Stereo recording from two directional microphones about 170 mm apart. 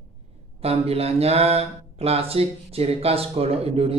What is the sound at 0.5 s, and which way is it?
Speech, 35° right (ahead or behind).